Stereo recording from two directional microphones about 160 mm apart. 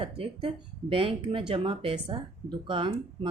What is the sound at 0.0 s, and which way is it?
Speech, 35° right (ahead or behind).